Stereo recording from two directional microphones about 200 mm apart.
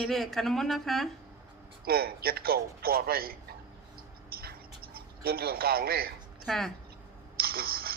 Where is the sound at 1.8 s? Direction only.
50° right (ahead or behind).